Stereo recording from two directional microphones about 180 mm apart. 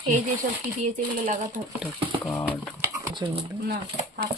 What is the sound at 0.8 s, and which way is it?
Speech, 45° right (ahead or behind).